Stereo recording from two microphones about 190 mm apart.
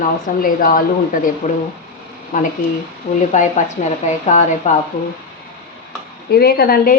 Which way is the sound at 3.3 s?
40° left (ahead or behind).